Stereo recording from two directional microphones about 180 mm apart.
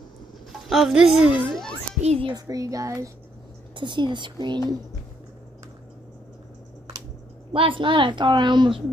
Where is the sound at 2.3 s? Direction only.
20° right (ahead or behind).